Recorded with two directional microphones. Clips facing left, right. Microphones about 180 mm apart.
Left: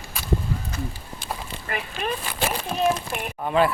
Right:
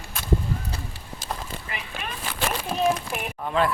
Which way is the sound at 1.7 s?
55° left (ahead or behind).